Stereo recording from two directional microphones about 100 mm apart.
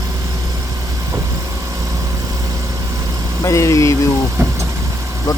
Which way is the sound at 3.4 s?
30° left (ahead or behind).